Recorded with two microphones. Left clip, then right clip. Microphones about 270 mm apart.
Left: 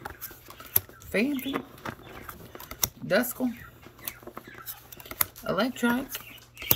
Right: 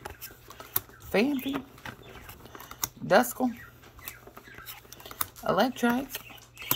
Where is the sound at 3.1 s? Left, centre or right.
Centre.